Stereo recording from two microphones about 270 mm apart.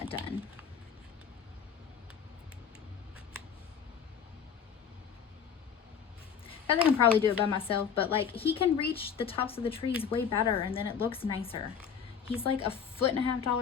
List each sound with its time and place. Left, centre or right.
0.0 s speech: left
6.7 s speech: centre
7.4 s a woman's voice: centre